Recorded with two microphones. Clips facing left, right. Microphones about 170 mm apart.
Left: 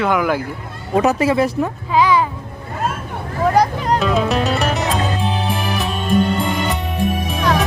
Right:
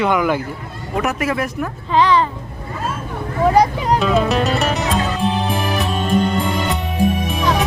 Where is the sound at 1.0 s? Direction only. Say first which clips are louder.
Left 5 dB; 30° left (ahead or behind).